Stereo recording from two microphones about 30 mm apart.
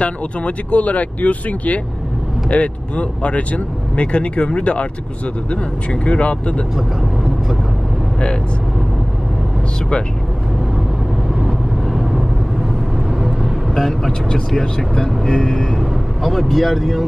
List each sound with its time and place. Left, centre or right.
0.0 s speech: left
6.0 s speech: left
13.7 s speech: centre
15.7 s speech: centre